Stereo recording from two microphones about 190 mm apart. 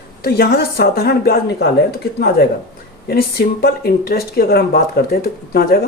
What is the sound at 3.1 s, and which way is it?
Speech, 55° left (ahead or behind).